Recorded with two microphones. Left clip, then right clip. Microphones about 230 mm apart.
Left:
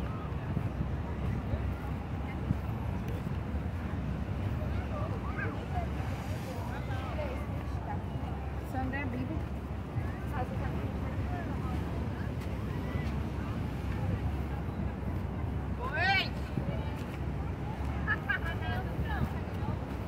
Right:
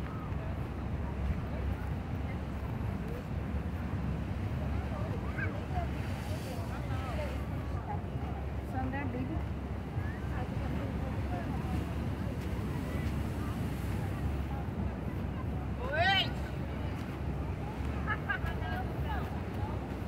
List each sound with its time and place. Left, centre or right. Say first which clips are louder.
15.9 s vehicle: right 1 dB; right